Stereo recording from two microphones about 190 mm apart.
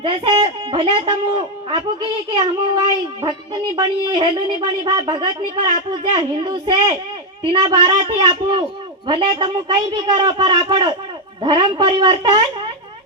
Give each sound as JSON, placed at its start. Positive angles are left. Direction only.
{"t": 0.0, "sound": "a woman's voice", "side_deg": -25}
{"t": 3.2, "sound": "a woman's voice", "side_deg": -35}
{"t": 3.8, "sound": "a woman's voice", "side_deg": -20}